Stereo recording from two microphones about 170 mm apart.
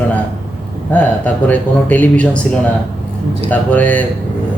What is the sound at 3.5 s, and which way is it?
Speech, 10° left (ahead or behind).